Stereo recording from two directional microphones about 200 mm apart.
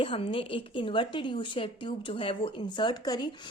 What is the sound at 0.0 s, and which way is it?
A woman's voice, 25° left (ahead or behind).